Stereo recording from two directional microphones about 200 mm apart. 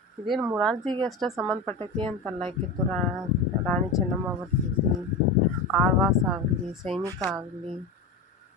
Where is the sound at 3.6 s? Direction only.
5° left (ahead or behind).